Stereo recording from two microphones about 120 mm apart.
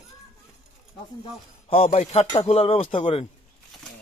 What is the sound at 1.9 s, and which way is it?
Speech, 65° left (ahead or behind).